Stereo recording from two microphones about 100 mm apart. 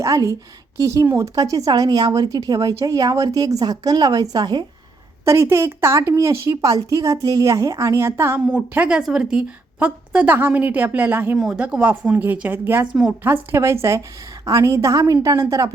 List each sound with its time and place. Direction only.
0.0 s speech: 35° right (ahead or behind)
5.2 s speech: 30° right (ahead or behind)
8.4 s a woman's voice: 15° right (ahead or behind); by 15.7 s 35° right (ahead or behind)